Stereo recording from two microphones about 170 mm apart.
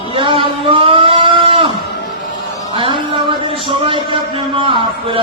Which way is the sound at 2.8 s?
30° right (ahead or behind).